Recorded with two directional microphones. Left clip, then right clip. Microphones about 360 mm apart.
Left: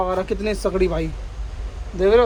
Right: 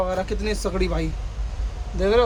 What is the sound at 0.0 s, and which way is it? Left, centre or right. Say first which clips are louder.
Speech: left 3 dB; centre.